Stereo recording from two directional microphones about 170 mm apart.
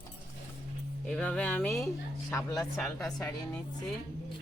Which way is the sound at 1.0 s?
5° left (ahead or behind).